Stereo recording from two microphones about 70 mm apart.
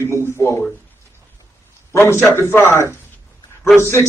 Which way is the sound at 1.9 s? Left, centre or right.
Left.